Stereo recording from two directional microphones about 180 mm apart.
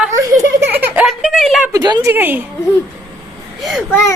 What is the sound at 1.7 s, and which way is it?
Speech, 20° right (ahead or behind).